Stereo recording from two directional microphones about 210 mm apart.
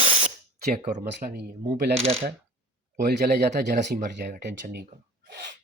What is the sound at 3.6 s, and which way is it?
Speech, 35° right (ahead or behind).